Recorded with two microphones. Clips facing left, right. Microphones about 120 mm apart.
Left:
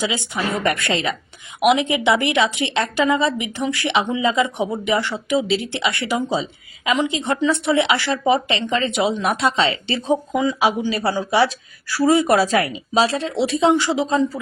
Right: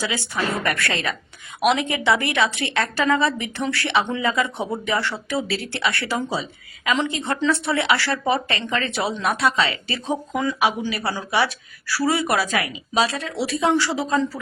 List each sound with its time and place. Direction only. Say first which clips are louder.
0.0 s a woman's voice: left 2 dB; 20° left (ahead or behind)